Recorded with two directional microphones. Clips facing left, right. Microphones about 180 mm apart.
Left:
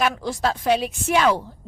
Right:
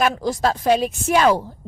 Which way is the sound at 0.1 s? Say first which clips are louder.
Right 3 dB; 40° right (ahead or behind).